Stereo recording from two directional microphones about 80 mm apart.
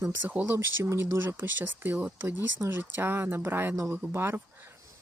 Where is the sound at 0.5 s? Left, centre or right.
Right.